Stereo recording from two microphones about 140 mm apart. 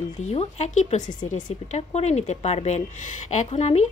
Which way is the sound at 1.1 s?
30° left (ahead or behind).